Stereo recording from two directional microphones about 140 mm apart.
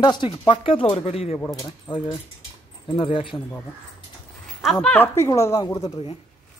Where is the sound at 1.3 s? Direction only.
20° left (ahead or behind).